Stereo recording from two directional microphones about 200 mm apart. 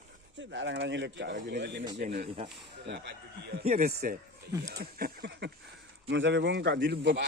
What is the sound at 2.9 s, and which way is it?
Speech, 55° right (ahead or behind).